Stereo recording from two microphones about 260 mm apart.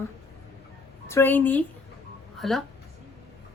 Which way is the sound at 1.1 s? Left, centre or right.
Centre.